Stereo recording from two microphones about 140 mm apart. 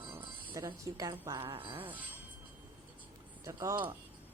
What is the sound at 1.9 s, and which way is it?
Speech, 10° right (ahead or behind).